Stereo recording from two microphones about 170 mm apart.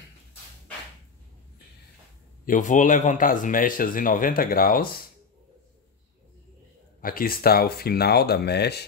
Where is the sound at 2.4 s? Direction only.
50° left (ahead or behind).